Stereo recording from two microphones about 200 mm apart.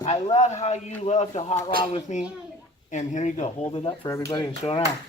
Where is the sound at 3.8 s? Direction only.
20° left (ahead or behind).